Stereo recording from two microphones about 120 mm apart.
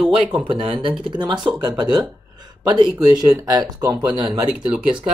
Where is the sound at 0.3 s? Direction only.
45° right (ahead or behind).